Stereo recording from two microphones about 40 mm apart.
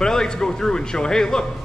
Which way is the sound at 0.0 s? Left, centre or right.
Centre.